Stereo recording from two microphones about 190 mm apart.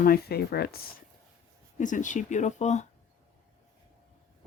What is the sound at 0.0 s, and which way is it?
Speech, 55° left (ahead or behind).